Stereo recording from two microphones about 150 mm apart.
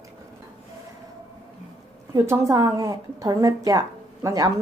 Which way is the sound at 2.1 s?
20° right (ahead or behind).